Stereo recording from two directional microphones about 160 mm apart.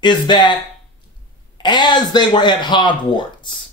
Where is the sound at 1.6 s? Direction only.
25° left (ahead or behind).